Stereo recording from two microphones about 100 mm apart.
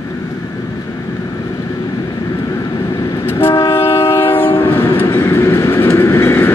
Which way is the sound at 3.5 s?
45° left (ahead or behind).